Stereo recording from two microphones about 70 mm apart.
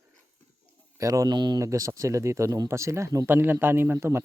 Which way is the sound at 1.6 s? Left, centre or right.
Right.